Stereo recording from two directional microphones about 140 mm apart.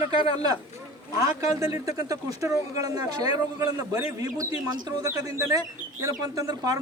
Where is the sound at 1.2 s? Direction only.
25° right (ahead or behind).